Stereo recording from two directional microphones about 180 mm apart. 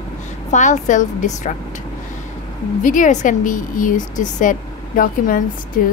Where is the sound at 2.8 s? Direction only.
45° left (ahead or behind).